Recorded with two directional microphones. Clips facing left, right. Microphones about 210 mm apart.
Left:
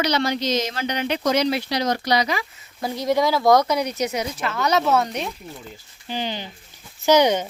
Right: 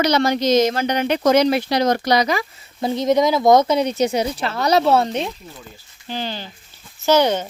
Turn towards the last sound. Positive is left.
turn(degrees=10)  # may be behind; listen again after turning